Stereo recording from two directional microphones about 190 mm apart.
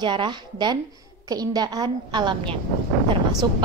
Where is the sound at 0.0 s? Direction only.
25° right (ahead or behind).